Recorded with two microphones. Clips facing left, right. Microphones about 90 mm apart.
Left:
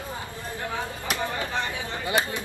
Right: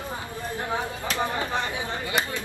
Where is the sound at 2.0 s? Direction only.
25° left (ahead or behind).